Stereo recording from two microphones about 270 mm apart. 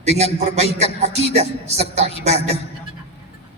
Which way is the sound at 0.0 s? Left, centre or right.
Right.